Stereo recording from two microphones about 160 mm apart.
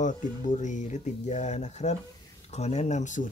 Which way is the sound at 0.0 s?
50° left (ahead or behind).